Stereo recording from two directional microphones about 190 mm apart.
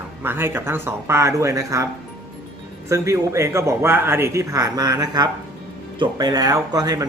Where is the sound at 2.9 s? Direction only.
15° right (ahead or behind).